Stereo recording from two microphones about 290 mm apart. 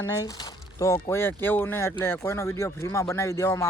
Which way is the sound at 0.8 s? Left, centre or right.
Centre.